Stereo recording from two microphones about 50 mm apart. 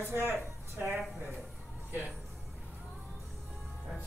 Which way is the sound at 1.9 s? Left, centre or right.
Right.